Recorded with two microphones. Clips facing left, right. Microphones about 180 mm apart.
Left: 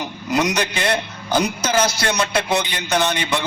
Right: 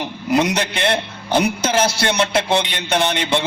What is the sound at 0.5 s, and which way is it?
A man's voice, 30° right (ahead or behind).